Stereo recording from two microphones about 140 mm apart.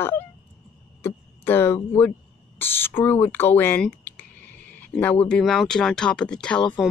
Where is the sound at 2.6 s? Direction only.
15° left (ahead or behind).